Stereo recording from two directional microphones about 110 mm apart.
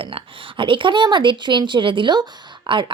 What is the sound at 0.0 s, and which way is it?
Speech, 50° right (ahead or behind).